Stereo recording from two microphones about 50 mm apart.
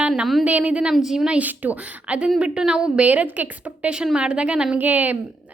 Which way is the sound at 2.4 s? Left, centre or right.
Centre.